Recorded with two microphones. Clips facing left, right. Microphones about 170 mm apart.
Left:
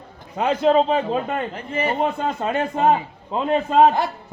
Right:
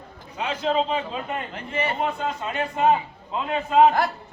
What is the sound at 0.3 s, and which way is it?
A man's voice, 50° left (ahead or behind).